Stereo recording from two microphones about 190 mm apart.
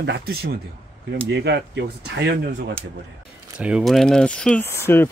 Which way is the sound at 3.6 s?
5° right (ahead or behind).